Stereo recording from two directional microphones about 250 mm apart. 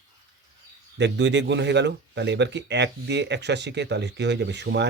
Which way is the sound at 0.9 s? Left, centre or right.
Right.